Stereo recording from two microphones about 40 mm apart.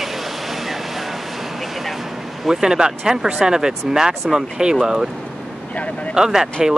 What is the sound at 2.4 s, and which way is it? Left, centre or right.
Speech, centre.